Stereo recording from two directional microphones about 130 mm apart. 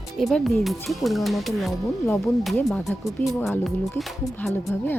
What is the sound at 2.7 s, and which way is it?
Speech, centre (ahead or behind).